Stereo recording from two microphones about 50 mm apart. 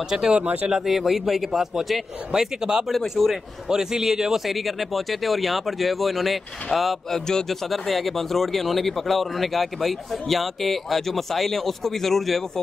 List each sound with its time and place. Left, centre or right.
0.1 s speech: centre
2.6 s speech: centre
2.9 s speech: centre
3.6 s speech: centre
7.2 s speech: centre